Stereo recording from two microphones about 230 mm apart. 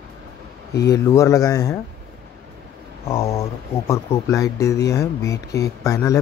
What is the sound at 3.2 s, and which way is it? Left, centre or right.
Speech, centre.